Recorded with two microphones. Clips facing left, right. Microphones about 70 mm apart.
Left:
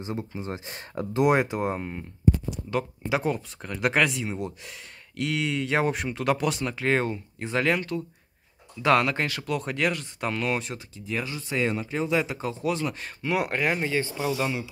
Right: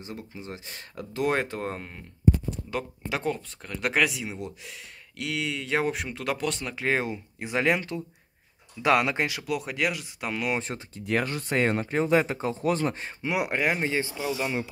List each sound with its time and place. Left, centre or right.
0.0 s speech: left
1.3 s speech: centre
6.7 s speech: centre
11.1 s speech: right
13.0 s speech: centre
14.2 s speech: centre